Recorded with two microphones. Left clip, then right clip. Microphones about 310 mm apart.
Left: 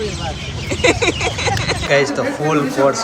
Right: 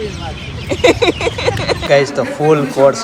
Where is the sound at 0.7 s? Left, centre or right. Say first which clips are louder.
Right 4 dB; centre.